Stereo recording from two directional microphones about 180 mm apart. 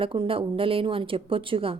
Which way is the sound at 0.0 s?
30° right (ahead or behind).